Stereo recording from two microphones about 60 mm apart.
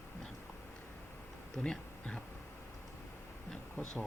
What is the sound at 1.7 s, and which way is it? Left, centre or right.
Speech, centre.